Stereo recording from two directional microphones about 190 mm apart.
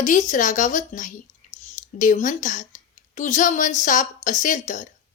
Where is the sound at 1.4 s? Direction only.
40° left (ahead or behind).